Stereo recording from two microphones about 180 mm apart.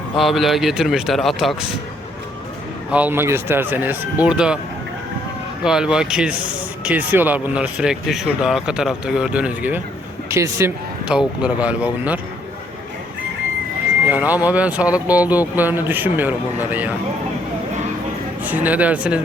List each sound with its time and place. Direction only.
0.2 s speech: centre (ahead or behind)
2.9 s speech: 10° right (ahead or behind)
5.6 s speech: 5° right (ahead or behind)
11.1 s speech: 5° right (ahead or behind)
14.1 s speech: 10° right (ahead or behind)
18.4 s speech: 10° right (ahead or behind)